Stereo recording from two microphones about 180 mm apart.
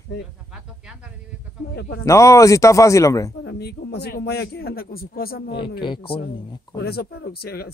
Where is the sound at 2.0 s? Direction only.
15° left (ahead or behind).